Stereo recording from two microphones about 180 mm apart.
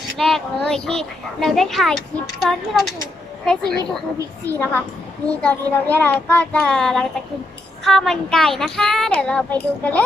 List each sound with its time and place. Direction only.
0.2 s a child's voice: centre (ahead or behind)